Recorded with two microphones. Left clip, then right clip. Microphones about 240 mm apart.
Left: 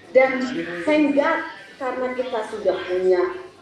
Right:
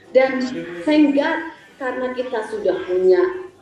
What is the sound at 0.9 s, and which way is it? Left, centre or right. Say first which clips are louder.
A woman's voice: right 2 dB; right.